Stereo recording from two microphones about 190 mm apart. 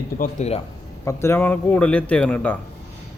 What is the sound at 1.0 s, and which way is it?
A man's voice, 15° left (ahead or behind).